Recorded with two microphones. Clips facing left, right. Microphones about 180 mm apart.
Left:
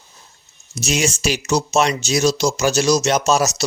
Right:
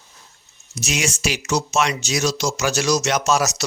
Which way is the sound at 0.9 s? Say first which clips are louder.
Left 4 dB; 30° left (ahead or behind).